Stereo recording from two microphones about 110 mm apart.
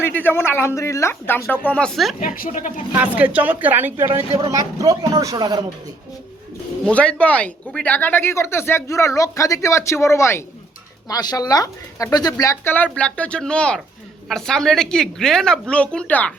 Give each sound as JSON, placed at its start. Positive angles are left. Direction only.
{"t": 0.0, "sound": "speech", "side_deg": 15}
{"t": 2.9, "sound": "a woman's voice", "side_deg": -15}
{"t": 4.4, "sound": "speech", "side_deg": -30}
{"t": 6.8, "sound": "speech", "side_deg": 10}
{"t": 11.1, "sound": "speech", "side_deg": 35}
{"t": 12.6, "sound": "a woman's voice", "side_deg": 15}